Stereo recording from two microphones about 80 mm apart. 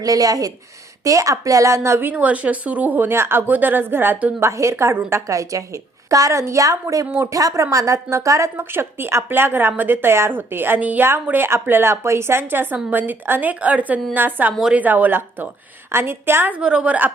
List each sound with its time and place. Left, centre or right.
0.0 s a woman's voice: right
2.0 s a woman's voice: centre
4.4 s a woman's voice: right
8.5 s a woman's voice: right
16.6 s speech: centre